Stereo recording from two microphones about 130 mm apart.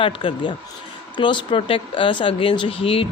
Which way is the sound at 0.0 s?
40° left (ahead or behind).